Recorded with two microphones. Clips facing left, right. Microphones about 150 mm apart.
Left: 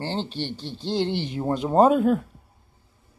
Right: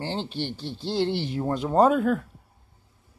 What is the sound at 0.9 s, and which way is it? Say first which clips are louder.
Speech: even; 20° left (ahead or behind).